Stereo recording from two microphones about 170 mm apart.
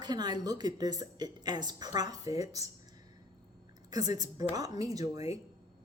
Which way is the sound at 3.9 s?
20° right (ahead or behind).